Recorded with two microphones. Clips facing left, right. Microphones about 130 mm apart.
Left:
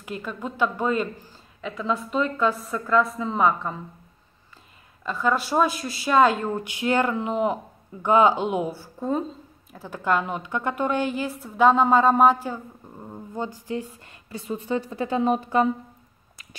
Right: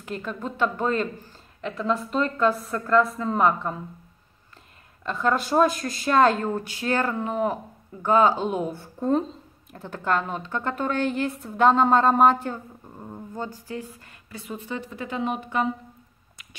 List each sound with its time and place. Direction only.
0.0 s a man's voice: 5° left (ahead or behind)
5.0 s a man's voice: 5° left (ahead or behind)
6.6 s a man's voice: 20° left (ahead or behind)
13.3 s a woman's voice: 15° left (ahead or behind); by 15.7 s 35° left (ahead or behind)